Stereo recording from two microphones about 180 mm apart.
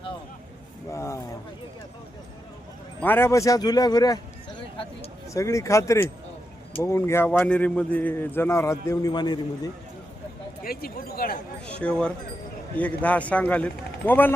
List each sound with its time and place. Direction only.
0.9 s a sound: 15° left (ahead or behind)
3.0 s speech: 10° left (ahead or behind)
5.3 s a man's voice: 15° left (ahead or behind)
10.6 s speech: 55° left (ahead or behind)
11.6 s a man's voice: 5° left (ahead or behind)